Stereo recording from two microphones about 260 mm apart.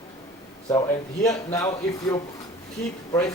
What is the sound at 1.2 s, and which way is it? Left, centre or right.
Speech, centre.